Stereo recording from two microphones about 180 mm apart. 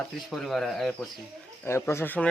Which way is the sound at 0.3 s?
Centre (ahead or behind).